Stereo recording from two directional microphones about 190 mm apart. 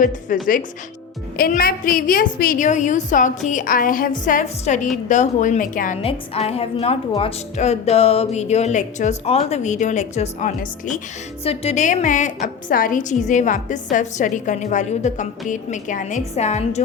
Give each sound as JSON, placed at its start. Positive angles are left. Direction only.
{"t": 0.3, "sound": "a woman's voice", "side_deg": 45}
{"t": 6.0, "sound": "a woman's voice", "side_deg": 30}